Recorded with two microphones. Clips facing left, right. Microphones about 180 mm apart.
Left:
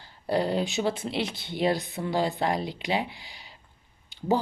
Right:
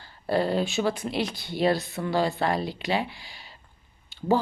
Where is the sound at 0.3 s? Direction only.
20° left (ahead or behind).